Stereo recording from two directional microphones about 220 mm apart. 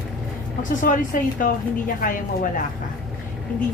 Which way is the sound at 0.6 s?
35° left (ahead or behind).